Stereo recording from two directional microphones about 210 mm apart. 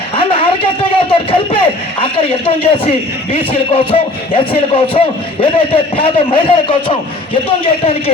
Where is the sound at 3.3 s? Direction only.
25° left (ahead or behind).